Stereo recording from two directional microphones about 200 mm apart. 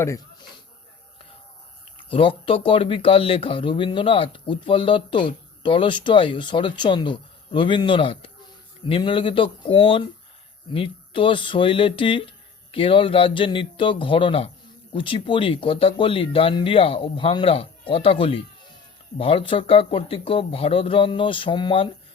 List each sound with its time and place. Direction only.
2.0 s speech: 25° left (ahead or behind)